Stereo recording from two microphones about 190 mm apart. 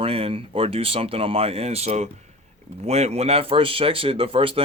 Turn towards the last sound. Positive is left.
turn(degrees=-30)  # may be behind; listen again after turning